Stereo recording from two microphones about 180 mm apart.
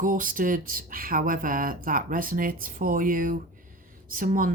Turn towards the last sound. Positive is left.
turn(degrees=-50)  # may be behind; listen again after turning